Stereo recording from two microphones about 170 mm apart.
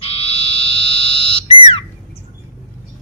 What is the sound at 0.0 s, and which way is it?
Frog, 35° left (ahead or behind).